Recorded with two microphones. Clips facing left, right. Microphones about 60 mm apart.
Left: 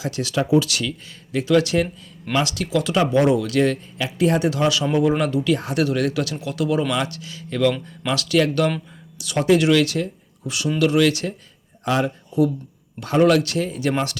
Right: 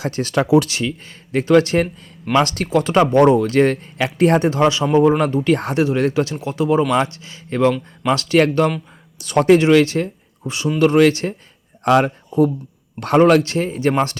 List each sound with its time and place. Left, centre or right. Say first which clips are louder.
0.0 s a man's voice: right 3 dB; right
0.7 s a man's voice: right 3 dB; right
3.9 s a man's voice: right 5 dB; right
9.1 s speech: right 5 dB; right
9.6 s a man's voice: right 4 dB; right